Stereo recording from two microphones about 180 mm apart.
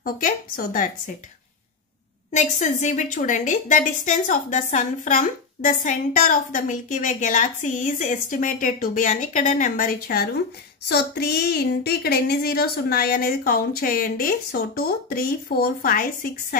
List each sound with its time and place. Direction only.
0.0 s a woman's voice: 50° left (ahead or behind)
2.3 s a woman's voice: 40° left (ahead or behind)